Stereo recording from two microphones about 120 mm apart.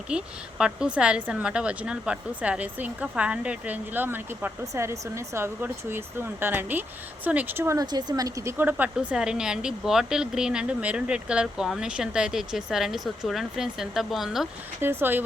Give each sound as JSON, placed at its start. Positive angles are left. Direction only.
{"t": 0.1, "sound": "speech", "side_deg": -10}
{"t": 7.9, "sound": "speech", "side_deg": -35}
{"t": 14.8, "sound": "speech", "side_deg": -15}